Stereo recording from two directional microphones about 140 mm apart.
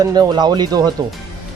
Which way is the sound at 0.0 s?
25° right (ahead or behind).